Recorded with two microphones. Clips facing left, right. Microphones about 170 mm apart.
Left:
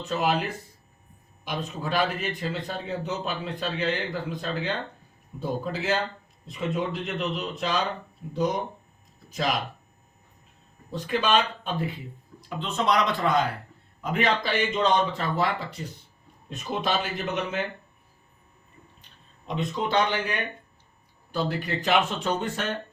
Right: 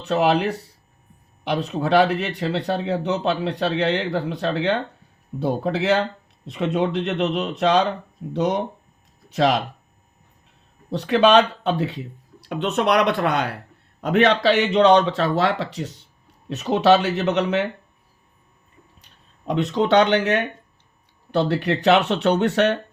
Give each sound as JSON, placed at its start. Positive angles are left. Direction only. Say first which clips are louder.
{"t": 0.0, "sound": "speech", "louder": "right 7 dB", "side_deg": -70}
{"t": 10.9, "sound": "speech", "louder": "right 9 dB", "side_deg": -75}
{"t": 14.0, "sound": "speech", "louder": "right 8 dB", "side_deg": -80}
{"t": 19.0, "sound": "speech", "louder": "right 9 dB", "side_deg": -80}